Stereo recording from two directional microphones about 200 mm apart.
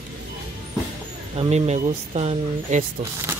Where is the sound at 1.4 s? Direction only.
35° right (ahead or behind).